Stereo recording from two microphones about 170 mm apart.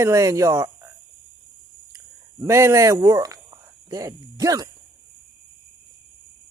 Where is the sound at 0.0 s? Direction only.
20° right (ahead or behind).